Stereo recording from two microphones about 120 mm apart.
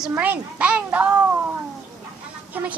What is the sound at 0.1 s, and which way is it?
A child's voice, 15° right (ahead or behind).